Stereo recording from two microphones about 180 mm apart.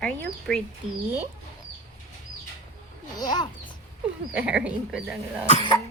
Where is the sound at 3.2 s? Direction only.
20° left (ahead or behind).